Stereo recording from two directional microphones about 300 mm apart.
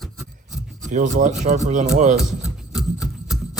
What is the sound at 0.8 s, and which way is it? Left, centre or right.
Speech, right.